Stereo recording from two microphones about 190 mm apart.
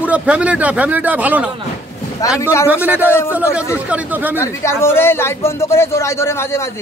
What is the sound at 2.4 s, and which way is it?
Speech, 15° left (ahead or behind).